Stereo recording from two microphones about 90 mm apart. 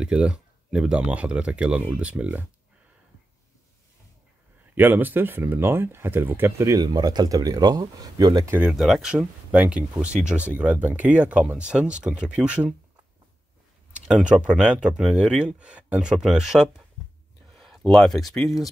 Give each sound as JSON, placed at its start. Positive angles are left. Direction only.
{"t": 0.0, "sound": "speech", "side_deg": -10}
{"t": 4.7, "sound": "speech", "side_deg": -20}
{"t": 6.8, "sound": "speech", "side_deg": -45}
{"t": 8.6, "sound": "speech", "side_deg": 0}
{"t": 14.0, "sound": "speech", "side_deg": -10}